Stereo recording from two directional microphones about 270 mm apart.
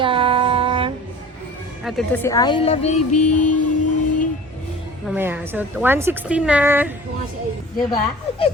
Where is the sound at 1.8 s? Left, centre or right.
Centre; by 3.2 s left.